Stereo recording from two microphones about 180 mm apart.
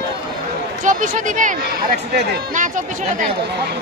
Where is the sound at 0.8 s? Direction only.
45° right (ahead or behind).